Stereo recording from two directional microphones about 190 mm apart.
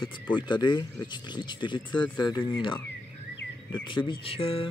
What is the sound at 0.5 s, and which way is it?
Speech, 25° left (ahead or behind).